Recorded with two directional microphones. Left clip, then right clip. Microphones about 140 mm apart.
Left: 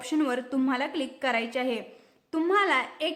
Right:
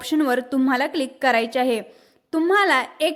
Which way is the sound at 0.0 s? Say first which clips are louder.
Right 7 dB; 45° right (ahead or behind).